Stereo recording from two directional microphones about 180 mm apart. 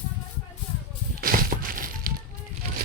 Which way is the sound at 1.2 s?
50° right (ahead or behind).